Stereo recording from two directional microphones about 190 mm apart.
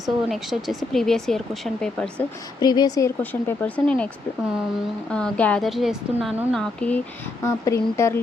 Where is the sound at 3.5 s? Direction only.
10° left (ahead or behind).